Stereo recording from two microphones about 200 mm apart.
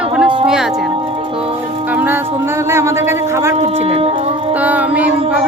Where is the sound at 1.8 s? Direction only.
10° right (ahead or behind).